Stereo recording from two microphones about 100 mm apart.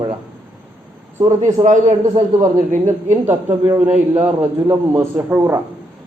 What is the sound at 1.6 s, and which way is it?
Speech, 50° right (ahead or behind).